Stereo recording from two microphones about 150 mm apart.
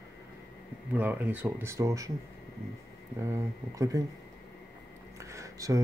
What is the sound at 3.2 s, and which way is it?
Speech, 20° right (ahead or behind).